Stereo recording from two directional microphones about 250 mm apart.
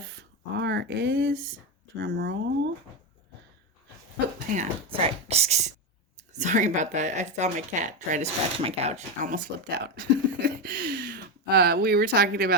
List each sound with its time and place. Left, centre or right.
0.0 s a sound: right
2.0 s speech: right
4.5 s speech: right